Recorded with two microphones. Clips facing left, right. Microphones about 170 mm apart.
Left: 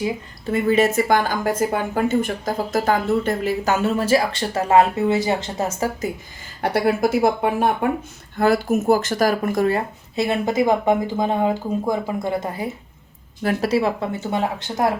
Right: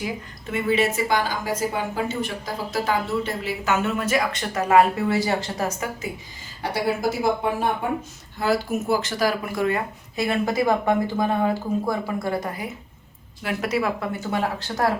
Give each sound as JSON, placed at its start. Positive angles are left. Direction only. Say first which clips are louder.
{"t": 0.0, "sound": "a woman's voice", "louder": "left 6 dB", "side_deg": 35}
{"t": 6.6, "sound": "speech", "louder": "left 5 dB", "side_deg": 60}
{"t": 13.4, "sound": "speech", "louder": "left 5 dB", "side_deg": 35}